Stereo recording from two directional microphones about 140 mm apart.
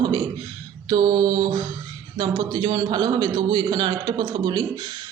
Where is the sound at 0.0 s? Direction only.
30° right (ahead or behind).